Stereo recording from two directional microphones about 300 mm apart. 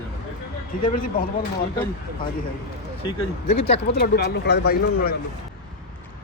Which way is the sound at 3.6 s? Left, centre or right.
Left.